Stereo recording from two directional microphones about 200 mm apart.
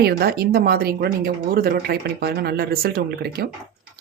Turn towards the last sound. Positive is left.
turn(degrees=-50)  # may be behind; listen again after turning